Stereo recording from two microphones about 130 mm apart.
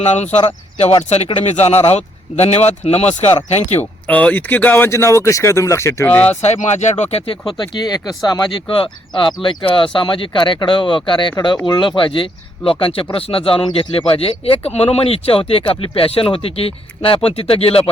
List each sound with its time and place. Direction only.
0.0 s speech: 60° left (ahead or behind)
3.8 s speech: 10° left (ahead or behind)
6.4 s speech: 60° left (ahead or behind)